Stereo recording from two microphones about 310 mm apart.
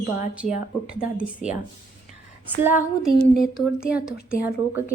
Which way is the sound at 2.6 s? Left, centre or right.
Centre.